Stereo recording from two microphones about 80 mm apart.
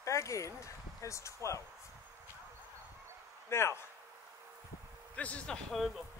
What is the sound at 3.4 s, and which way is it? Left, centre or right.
Speech, left.